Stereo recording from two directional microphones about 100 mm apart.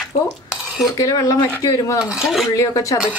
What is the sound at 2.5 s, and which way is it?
Dishes, 30° left (ahead or behind).